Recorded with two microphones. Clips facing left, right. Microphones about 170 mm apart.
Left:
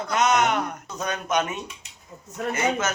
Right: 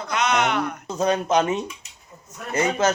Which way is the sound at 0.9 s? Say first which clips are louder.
Right 9 dB; 30° right (ahead or behind).